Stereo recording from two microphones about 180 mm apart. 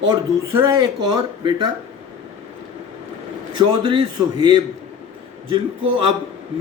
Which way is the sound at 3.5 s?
25° right (ahead or behind).